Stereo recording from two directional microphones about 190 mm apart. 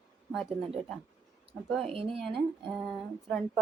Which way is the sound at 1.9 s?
30° right (ahead or behind).